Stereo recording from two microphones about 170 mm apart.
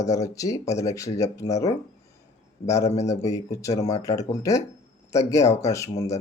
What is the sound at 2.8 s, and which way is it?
Speech, 40° left (ahead or behind).